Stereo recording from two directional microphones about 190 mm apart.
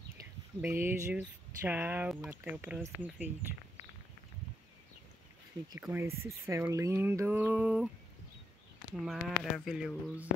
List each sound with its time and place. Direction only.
0.6 s speech: 10° right (ahead or behind)
5.8 s speech: 15° right (ahead or behind)
9.0 s speech: centre (ahead or behind)